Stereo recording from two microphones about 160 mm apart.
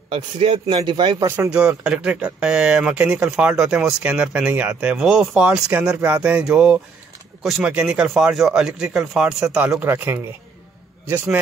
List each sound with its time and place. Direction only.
0.1 s a man's voice: 35° right (ahead or behind)
1.2 s speech: 15° right (ahead or behind)